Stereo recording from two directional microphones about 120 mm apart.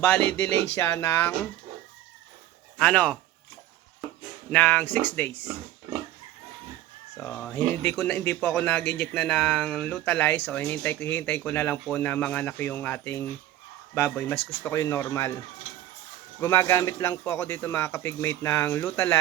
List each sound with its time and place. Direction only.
0.0 s speech: 20° left (ahead or behind)
2.7 s speech: 10° left (ahead or behind)
4.5 s speech: 10° left (ahead or behind)
7.2 s speech: 15° left (ahead or behind)